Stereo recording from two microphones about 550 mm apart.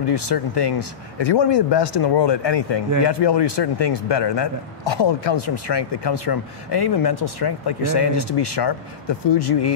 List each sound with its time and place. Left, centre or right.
0.0 s a man's voice: left